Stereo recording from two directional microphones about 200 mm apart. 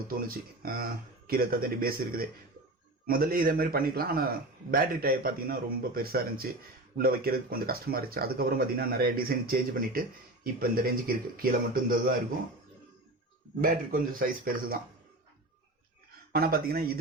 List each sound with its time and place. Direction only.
0.1 s speech: 45° right (ahead or behind)
13.6 s speech: 45° right (ahead or behind)
16.3 s speech: 50° right (ahead or behind)